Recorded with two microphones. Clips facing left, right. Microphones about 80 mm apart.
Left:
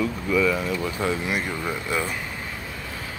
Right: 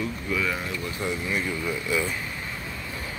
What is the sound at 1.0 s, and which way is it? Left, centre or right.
Speech, left.